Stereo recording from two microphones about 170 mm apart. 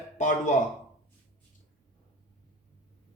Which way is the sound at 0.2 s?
45° left (ahead or behind).